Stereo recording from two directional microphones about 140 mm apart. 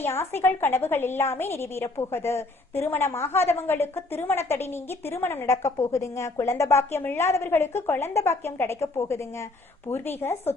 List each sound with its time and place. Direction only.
0.0 s a woman's voice: 15° left (ahead or behind)